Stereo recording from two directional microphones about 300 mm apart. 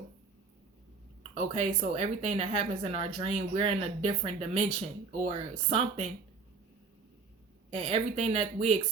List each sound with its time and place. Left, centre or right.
1.5 s speech: right
7.7 s speech: centre